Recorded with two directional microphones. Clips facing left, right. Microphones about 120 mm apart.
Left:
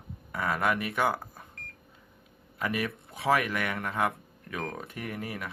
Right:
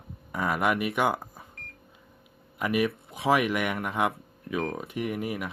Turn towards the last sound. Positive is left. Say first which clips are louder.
# right 6 dB
turn(degrees=-15)  # may be behind; listen again after turning